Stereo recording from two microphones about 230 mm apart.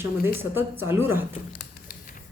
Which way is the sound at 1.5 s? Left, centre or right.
Left.